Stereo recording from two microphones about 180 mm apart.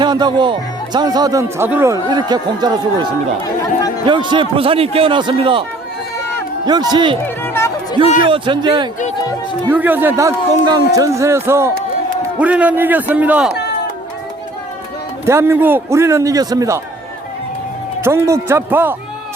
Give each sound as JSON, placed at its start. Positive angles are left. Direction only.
{"t": 0.0, "sound": "speech", "side_deg": -25}
{"t": 2.0, "sound": "speech", "side_deg": -25}
{"t": 6.7, "sound": "speech", "side_deg": -25}
{"t": 7.3, "sound": "music", "side_deg": 10}
{"t": 8.2, "sound": "speech", "side_deg": -25}
{"t": 9.6, "sound": "a man's voice", "side_deg": -10}
{"t": 15.3, "sound": "a man's voice", "side_deg": -15}
{"t": 18.0, "sound": "a man's voice", "side_deg": -15}